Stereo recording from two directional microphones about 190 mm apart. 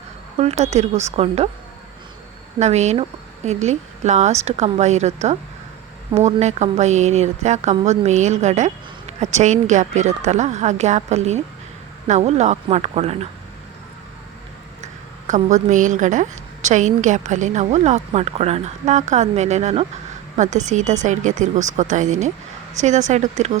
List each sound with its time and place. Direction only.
0.3 s a woman's voice: 35° right (ahead or behind)
2.6 s a woman's voice: 35° right (ahead or behind)
15.3 s a woman's voice: 40° right (ahead or behind)